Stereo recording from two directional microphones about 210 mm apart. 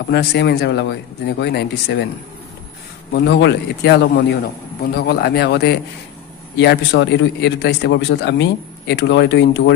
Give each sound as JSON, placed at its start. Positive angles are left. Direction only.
{"t": 0.1, "sound": "a man's voice", "side_deg": 50}
{"t": 3.2, "sound": "a man's voice", "side_deg": 55}